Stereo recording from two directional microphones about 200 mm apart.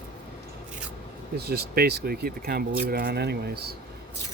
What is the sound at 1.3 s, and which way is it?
Speech, 55° right (ahead or behind).